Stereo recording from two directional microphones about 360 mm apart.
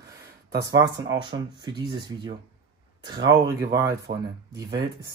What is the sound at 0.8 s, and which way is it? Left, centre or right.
Speech, centre.